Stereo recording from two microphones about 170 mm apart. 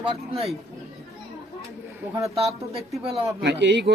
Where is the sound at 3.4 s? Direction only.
85° right.